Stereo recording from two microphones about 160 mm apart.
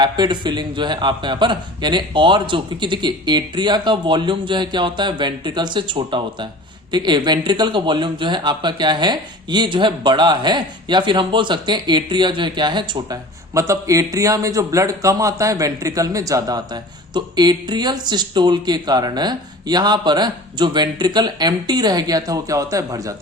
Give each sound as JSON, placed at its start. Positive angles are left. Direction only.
{"t": 0.0, "sound": "speech", "side_deg": -30}